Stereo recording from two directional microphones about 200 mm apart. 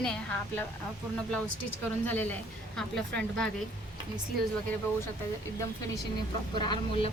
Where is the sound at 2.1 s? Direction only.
10° left (ahead or behind).